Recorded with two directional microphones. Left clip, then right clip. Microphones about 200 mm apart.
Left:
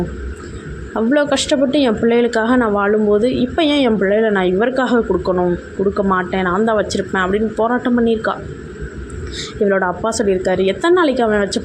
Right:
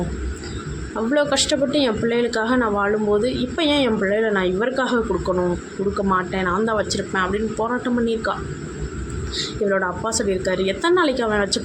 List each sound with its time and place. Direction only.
0.9 s speech: 30° left (ahead or behind)
9.4 s speech: 25° left (ahead or behind)